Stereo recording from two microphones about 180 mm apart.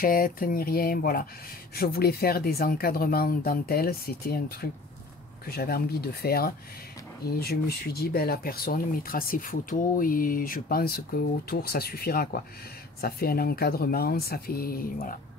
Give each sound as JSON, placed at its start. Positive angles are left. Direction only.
{"t": 0.0, "sound": "speech", "side_deg": 50}